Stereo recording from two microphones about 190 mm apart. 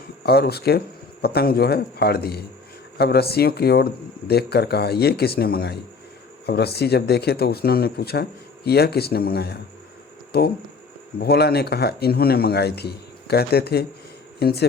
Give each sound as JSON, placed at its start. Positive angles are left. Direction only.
{"t": 0.2, "sound": "speech", "side_deg": 55}